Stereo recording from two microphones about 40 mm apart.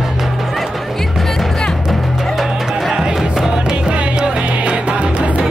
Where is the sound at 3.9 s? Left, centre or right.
Right.